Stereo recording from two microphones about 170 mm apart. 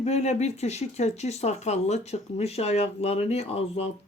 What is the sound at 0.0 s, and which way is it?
Speech, 40° left (ahead or behind).